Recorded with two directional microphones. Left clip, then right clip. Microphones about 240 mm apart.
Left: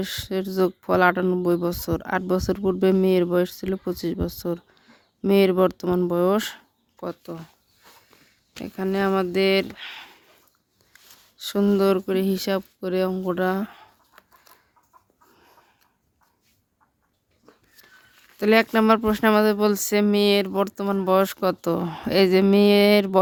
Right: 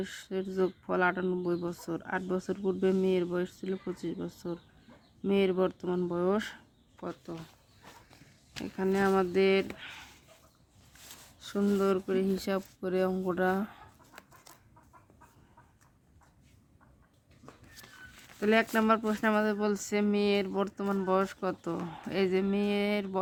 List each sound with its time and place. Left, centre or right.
0.0 s speech: left
8.6 s speech: left
11.3 s speech: left
18.3 s speech: left